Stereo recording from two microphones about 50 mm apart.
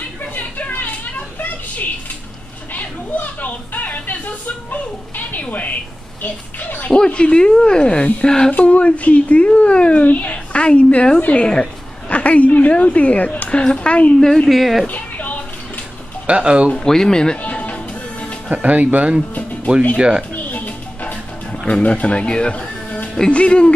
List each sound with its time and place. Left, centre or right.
0.4 s a sound: left
2.7 s children playing: left
4.6 s a child's voice: left
7.1 s a woman's voice: left
14.2 s speech: centre
14.5 s speech: centre
14.9 s music: left
16.3 s speech: right
16.7 s speech: centre
17.4 s music: left
18.5 s speech: right
20.0 s speech: centre
20.3 s music: left
23.3 s speech: left